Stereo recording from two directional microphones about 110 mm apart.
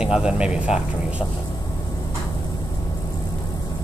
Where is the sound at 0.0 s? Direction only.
5° right (ahead or behind).